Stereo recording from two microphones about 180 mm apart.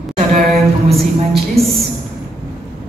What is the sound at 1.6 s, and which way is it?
Speech, 35° right (ahead or behind).